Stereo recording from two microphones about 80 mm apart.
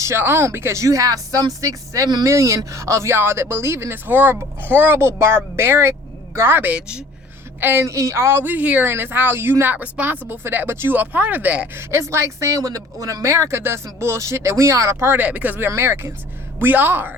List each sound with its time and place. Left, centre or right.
0.2 s speech: right; by 11.7 s centre
11.7 s speech: right
15.2 s speech: centre
15.7 s speech: right